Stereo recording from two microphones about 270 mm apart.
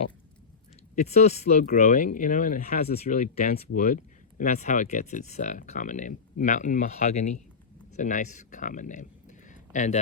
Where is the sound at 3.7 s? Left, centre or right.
Left.